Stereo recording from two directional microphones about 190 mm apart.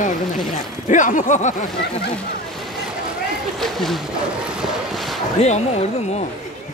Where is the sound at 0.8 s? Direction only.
40° left (ahead or behind).